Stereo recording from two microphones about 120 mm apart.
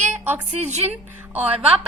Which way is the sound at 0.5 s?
65° right (ahead or behind).